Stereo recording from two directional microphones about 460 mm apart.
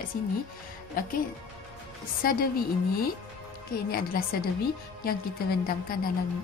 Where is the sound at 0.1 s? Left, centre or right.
Centre.